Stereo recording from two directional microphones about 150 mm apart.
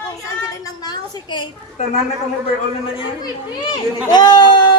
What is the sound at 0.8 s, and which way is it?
Speech, 30° left (ahead or behind).